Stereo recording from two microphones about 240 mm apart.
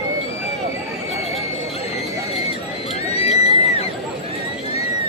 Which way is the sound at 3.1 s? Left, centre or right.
Left.